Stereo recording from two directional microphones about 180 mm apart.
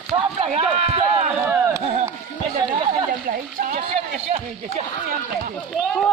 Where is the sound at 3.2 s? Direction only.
50° right (ahead or behind).